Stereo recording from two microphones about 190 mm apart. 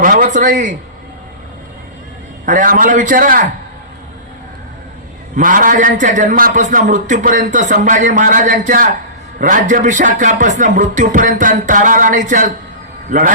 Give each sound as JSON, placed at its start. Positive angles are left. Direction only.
{"t": 0.0, "sound": "a man's voice", "side_deg": -45}
{"t": 2.5, "sound": "a man's voice", "side_deg": -45}
{"t": 5.4, "sound": "a man's voice", "side_deg": -45}